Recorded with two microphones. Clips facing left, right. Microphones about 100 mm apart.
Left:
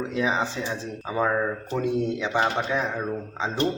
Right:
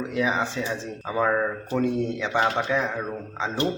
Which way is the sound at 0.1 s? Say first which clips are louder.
Right 2 dB; 25° left (ahead or behind).